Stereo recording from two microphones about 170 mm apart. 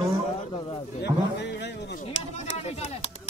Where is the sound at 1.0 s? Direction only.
85° left.